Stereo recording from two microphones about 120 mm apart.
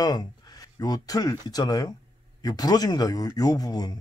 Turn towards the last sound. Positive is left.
turn(degrees=35)  # may be behind; listen again after turning